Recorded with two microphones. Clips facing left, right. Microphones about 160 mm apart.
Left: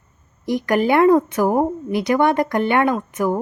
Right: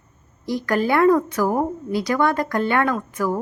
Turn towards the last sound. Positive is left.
turn(degrees=20)  # may be behind; listen again after turning